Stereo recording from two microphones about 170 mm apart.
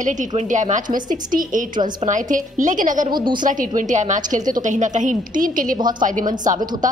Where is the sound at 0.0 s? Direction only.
45° right (ahead or behind).